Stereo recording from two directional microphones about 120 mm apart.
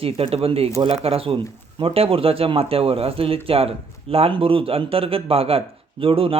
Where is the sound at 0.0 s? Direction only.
55° right (ahead or behind).